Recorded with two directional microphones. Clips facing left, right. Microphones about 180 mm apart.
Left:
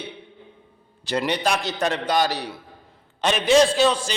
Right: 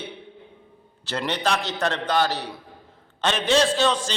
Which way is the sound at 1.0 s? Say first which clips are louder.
Left 3 dB; 15° left (ahead or behind).